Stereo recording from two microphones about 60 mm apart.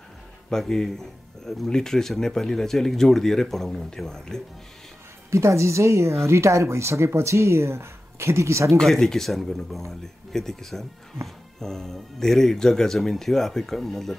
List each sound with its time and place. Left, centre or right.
0.5 s speech: centre
5.3 s speech: right
8.7 s speech: centre